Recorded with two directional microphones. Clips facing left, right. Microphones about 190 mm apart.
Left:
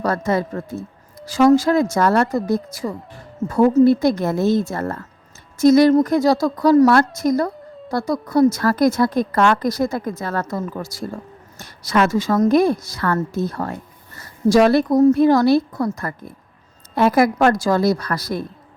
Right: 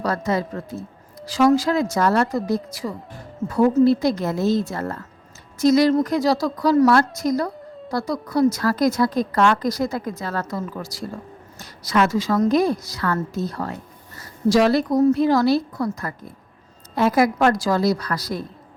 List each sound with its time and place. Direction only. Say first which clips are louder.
0.0 s a woman's voice: left 3 dB; 50° left (ahead or behind)